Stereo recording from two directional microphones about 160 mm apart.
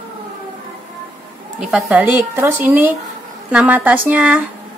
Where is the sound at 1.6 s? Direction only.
5° right (ahead or behind).